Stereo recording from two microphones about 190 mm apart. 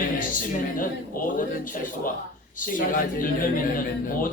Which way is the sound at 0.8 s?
45° left (ahead or behind).